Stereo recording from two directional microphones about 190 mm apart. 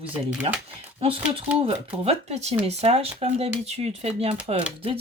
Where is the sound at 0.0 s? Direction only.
5° right (ahead or behind).